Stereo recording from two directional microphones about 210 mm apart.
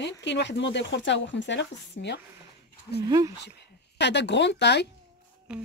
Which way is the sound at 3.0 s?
15° right (ahead or behind).